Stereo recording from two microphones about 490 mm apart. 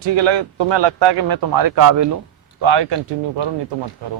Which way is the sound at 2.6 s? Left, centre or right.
Right.